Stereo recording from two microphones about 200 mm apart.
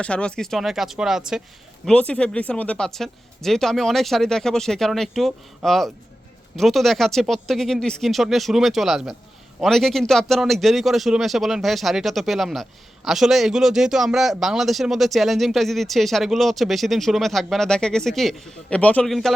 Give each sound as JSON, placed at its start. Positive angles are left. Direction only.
{"t": 0.0, "sound": "speech", "side_deg": 5}